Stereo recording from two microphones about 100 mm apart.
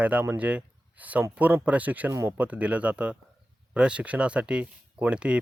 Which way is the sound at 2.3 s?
15° right (ahead or behind).